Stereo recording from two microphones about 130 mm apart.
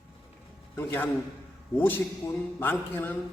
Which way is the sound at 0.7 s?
15° left (ahead or behind).